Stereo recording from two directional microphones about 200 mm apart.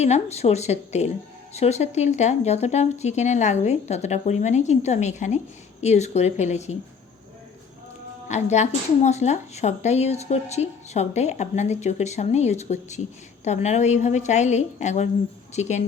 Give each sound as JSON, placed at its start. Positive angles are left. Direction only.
{"t": 0.0, "sound": "speech", "side_deg": 35}
{"t": 8.3, "sound": "speech", "side_deg": 35}